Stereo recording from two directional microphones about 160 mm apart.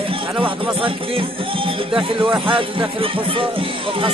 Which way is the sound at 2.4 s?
30° right (ahead or behind).